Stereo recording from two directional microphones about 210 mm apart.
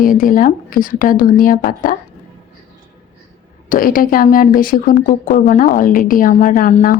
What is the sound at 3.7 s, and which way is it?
Speech, 40° left (ahead or behind).